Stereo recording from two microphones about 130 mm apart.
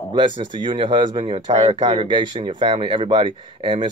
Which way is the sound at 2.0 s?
35° right (ahead or behind).